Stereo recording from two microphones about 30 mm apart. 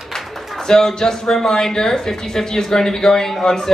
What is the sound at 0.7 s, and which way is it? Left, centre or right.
A man's voice, centre.